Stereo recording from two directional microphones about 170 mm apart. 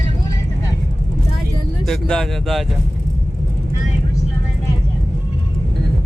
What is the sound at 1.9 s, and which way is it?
Speech, 5° left (ahead or behind).